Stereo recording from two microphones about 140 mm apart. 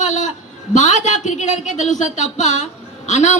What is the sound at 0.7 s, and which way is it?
A man's voice, 60° left (ahead or behind).